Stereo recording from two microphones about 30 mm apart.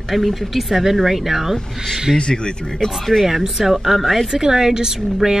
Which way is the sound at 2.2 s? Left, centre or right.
Left.